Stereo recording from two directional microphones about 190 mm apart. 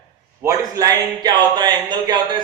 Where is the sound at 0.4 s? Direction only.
20° right (ahead or behind).